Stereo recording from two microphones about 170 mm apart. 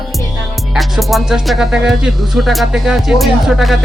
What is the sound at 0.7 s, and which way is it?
Speech, centre (ahead or behind).